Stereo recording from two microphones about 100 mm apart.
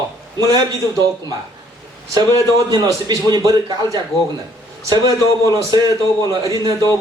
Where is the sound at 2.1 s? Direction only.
40° right (ahead or behind).